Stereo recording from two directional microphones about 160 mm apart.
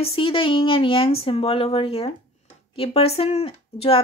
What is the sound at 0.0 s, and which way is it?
Speech, 35° left (ahead or behind).